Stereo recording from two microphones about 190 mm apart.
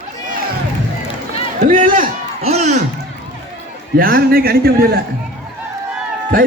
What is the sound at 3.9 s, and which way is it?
A man's voice, 50° right (ahead or behind).